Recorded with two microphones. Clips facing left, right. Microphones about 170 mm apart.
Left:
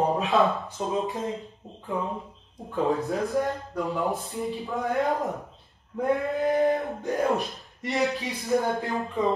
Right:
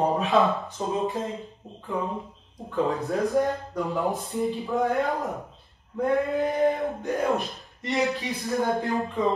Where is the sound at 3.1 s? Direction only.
20° right (ahead or behind).